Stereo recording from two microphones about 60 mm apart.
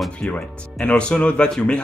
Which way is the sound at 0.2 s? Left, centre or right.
Centre.